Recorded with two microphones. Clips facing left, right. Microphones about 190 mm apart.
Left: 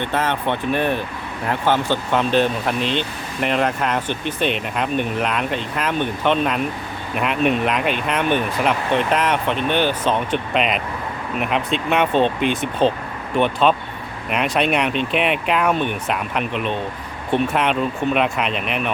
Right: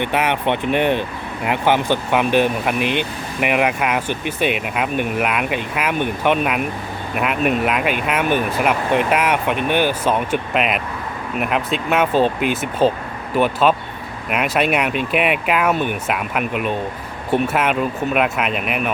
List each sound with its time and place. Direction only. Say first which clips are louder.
0.0 s speech: right 2 dB; 15° right (ahead or behind)